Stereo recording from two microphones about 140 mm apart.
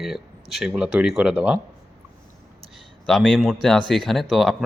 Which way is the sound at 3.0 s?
5° left (ahead or behind).